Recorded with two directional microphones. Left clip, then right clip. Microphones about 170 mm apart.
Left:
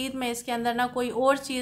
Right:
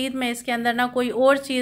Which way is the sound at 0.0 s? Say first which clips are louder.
Right 5 dB; 15° right (ahead or behind).